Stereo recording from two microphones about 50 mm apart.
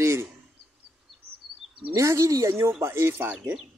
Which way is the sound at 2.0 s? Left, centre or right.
Right.